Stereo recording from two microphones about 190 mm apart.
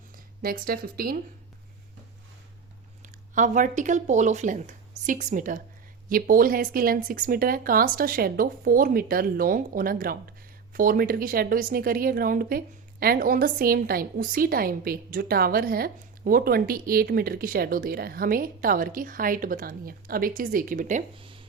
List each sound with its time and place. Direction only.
0.4 s speech: 50° right (ahead or behind)
3.0 s speech: 40° right (ahead or behind)